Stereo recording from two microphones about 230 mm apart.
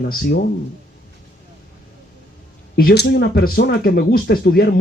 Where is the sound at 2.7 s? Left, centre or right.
Left.